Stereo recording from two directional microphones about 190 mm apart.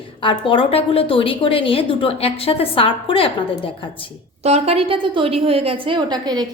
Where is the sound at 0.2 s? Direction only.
25° left (ahead or behind).